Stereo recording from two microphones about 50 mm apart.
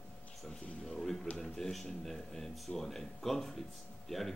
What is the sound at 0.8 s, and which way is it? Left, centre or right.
Speech, centre.